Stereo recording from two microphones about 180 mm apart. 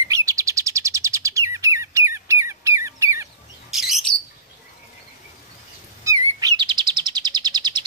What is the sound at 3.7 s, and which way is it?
Bird, centre (ahead or behind).